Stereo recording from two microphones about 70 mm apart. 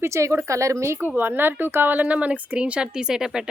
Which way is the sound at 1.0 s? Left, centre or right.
Right.